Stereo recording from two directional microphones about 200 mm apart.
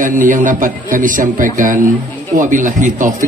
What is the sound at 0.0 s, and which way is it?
A man's voice, 40° right (ahead or behind).